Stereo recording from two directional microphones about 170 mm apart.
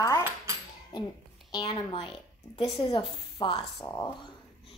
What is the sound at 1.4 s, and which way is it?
A woman's voice, 25° left (ahead or behind).